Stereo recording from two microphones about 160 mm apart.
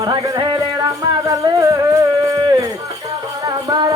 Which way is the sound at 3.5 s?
25° right (ahead or behind).